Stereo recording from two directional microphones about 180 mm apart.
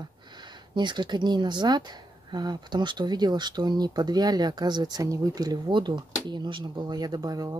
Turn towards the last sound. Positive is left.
turn(degrees=-20)  # may be behind; listen again after turning